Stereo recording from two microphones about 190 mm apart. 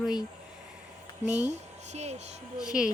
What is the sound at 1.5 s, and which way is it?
Speech, 35° right (ahead or behind).